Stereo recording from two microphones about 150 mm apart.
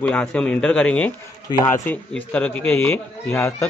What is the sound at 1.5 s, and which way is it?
Speech, 30° left (ahead or behind).